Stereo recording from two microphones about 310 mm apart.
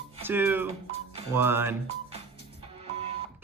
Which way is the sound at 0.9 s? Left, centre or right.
Left.